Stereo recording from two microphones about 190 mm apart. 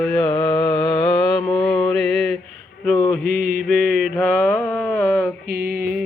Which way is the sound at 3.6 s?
Centre (ahead or behind).